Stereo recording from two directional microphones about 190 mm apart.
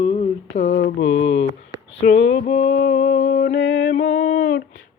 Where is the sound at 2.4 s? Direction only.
35° left (ahead or behind).